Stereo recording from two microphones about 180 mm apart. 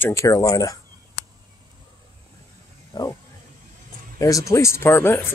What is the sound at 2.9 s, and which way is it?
Speech, 20° left (ahead or behind).